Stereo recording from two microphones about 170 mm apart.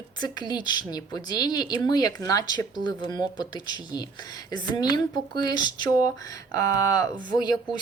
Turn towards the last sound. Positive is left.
turn(degrees=25)  # may be behind; listen again after turning